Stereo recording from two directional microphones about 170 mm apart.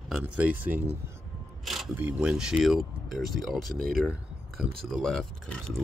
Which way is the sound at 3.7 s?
60° right (ahead or behind).